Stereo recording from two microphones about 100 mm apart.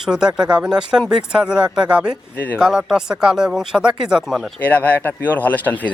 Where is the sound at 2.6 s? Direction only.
5° right (ahead or behind).